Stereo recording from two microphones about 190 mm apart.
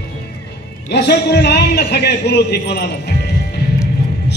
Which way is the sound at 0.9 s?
60° left (ahead or behind).